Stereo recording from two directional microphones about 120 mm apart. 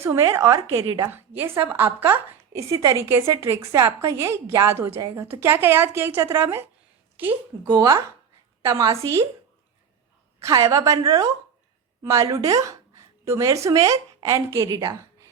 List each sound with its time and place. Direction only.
0.0 s a woman's voice: 25° right (ahead or behind)
7.7 s a woman's voice: 30° right (ahead or behind)
10.4 s a woman's voice: 25° right (ahead or behind)